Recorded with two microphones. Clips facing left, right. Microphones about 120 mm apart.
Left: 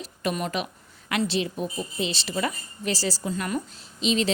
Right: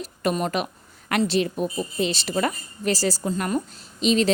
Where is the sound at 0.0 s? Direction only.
45° right (ahead or behind).